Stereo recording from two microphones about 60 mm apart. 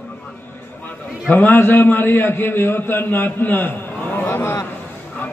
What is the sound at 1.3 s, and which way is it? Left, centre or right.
A man's voice, left.